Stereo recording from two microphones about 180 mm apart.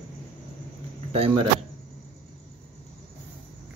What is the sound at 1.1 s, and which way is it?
Speech, 30° right (ahead or behind).